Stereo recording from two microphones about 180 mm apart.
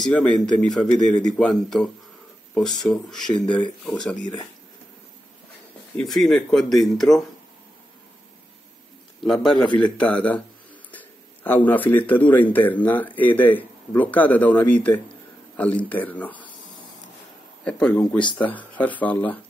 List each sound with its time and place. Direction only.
0.0 s speech: 5° left (ahead or behind)
4.2 s speech: 20° left (ahead or behind)
5.9 s speech: centre (ahead or behind)
9.2 s speech: centre (ahead or behind)
10.9 s a sound: 10° left (ahead or behind)
12.1 s speech: 10° left (ahead or behind)
17.6 s speech: 5° left (ahead or behind)